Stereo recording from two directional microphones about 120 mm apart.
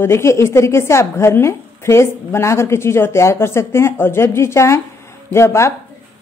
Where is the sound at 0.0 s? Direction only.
20° left (ahead or behind).